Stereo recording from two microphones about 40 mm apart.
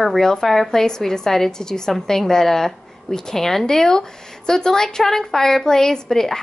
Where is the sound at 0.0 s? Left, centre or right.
Centre.